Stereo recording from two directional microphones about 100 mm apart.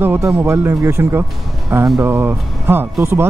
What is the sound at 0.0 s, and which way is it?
Speech, 25° right (ahead or behind).